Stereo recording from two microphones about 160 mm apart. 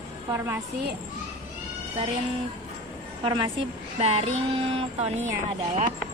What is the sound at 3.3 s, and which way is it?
Speech, 35° right (ahead or behind).